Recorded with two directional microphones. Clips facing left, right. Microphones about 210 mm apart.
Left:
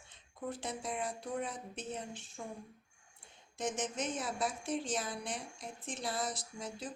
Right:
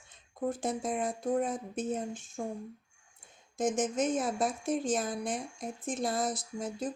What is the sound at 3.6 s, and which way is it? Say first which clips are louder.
Speech: right 8 dB; 50° right (ahead or behind).